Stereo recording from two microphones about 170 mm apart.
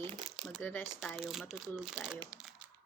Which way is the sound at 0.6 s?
10° left (ahead or behind).